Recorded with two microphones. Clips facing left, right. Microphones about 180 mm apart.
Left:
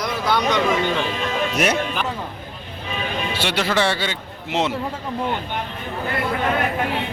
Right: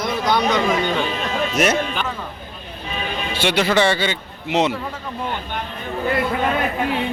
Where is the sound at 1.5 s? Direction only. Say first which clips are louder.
Right 4 dB; 10° left (ahead or behind).